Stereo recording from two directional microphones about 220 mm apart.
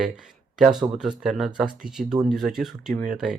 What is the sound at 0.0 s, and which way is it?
Speech, centre (ahead or behind).